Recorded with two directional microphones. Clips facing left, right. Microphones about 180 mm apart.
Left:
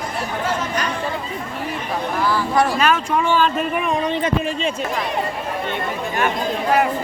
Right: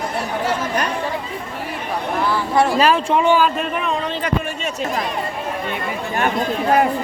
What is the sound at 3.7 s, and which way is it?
Speech, 15° left (ahead or behind).